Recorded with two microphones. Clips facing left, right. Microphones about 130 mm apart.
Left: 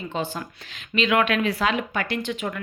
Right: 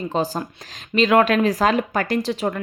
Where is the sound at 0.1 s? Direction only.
35° right (ahead or behind).